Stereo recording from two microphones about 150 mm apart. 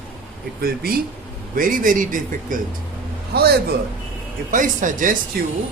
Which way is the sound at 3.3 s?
90° right.